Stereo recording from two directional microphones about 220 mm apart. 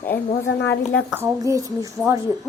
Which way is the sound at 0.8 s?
10° right (ahead or behind).